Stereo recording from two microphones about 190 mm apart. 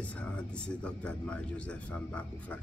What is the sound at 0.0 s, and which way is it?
Speech, 5° left (ahead or behind).